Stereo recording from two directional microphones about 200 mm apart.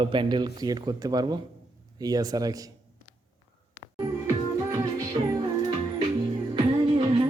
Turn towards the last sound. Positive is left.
turn(degrees=-25)  # may be behind; listen again after turning